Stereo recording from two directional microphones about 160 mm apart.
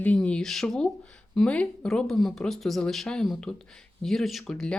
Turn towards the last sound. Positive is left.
turn(degrees=5)  # may be behind; listen again after turning